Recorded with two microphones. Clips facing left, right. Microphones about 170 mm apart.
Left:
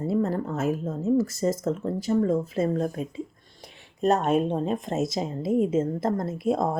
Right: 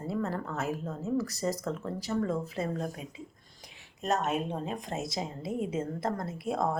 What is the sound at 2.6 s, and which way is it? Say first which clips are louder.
Speech: left 8 dB; 45° left (ahead or behind).